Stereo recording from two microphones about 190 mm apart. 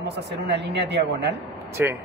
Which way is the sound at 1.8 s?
10° right (ahead or behind).